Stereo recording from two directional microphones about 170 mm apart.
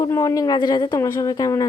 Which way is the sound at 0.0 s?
20° left (ahead or behind).